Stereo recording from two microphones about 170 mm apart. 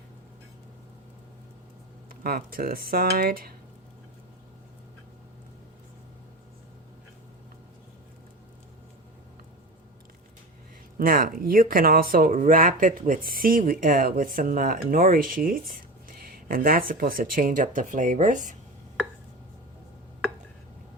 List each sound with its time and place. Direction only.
2.0 s speech: 60° right (ahead or behind)
10.9 s speech: 55° right (ahead or behind)